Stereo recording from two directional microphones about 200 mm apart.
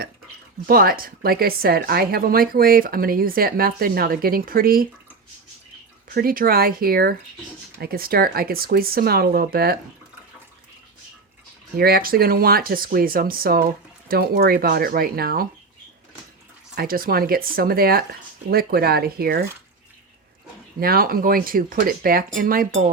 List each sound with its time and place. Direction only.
0.7 s a woman's voice: 50° right (ahead or behind)
6.1 s a woman's voice: 45° right (ahead or behind)
11.8 s a woman's voice: 50° right (ahead or behind)
16.7 s a woman's voice: 45° right (ahead or behind)
20.7 s a woman's voice: 50° right (ahead or behind)